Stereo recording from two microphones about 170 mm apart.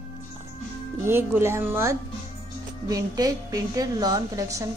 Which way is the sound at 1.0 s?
15° right (ahead or behind).